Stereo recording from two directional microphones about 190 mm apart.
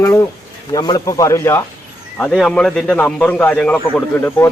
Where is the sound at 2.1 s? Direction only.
5° left (ahead or behind).